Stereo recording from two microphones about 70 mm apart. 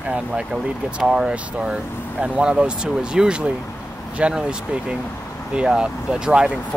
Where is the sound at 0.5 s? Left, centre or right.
Centre.